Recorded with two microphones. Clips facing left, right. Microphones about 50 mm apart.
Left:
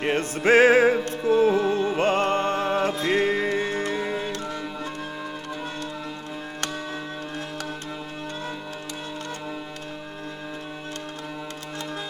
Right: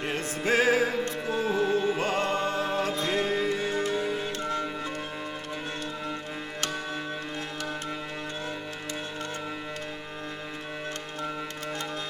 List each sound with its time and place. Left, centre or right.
0.0 s music: left